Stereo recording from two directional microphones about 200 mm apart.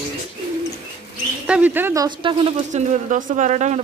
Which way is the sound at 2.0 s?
25° right (ahead or behind).